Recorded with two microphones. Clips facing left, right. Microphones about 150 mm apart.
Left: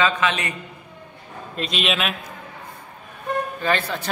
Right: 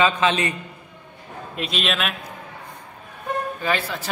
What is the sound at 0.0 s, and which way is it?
Speech, 30° right (ahead or behind).